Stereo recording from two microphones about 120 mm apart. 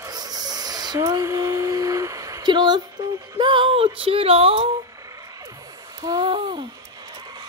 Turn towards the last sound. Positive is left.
turn(degrees=-45)  # may be behind; listen again after turning